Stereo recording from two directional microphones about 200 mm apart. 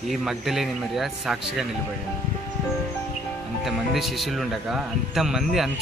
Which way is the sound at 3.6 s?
Centre (ahead or behind).